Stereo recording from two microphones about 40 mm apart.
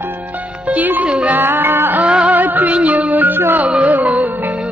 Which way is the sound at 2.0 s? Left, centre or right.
Right.